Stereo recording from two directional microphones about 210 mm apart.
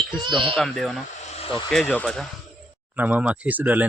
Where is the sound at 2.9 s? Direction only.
10° right (ahead or behind).